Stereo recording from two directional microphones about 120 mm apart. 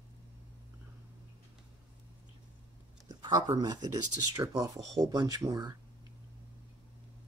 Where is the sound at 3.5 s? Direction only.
35° right (ahead or behind).